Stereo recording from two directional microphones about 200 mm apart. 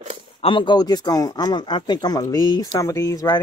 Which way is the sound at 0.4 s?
25° left (ahead or behind).